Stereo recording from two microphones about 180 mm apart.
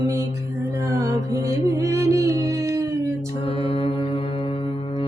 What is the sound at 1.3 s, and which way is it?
Music, 20° right (ahead or behind).